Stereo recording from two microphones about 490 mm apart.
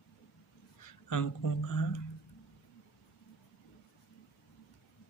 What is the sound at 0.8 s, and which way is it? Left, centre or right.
Speech, left.